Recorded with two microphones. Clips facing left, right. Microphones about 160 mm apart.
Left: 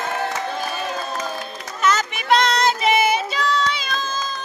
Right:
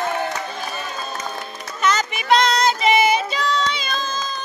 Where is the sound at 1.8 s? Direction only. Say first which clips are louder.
Even; 5° left (ahead or behind).